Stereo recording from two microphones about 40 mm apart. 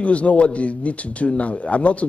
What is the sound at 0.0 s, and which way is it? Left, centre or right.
A man's voice, left.